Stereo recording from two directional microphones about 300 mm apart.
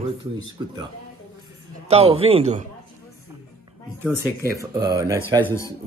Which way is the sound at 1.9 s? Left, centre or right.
Centre.